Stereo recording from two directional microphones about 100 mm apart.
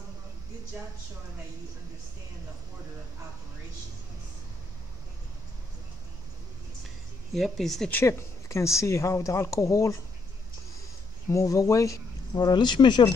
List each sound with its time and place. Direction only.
7.3 s speech: centre (ahead or behind)
7.9 s speech: 25° left (ahead or behind)
11.2 s speech: 30° left (ahead or behind); by 13.1 s 50° left (ahead or behind)